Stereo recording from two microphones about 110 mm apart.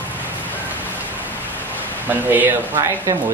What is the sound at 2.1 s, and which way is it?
Speech, 15° right (ahead or behind).